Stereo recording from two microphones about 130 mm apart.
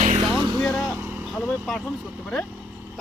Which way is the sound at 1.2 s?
Centre (ahead or behind).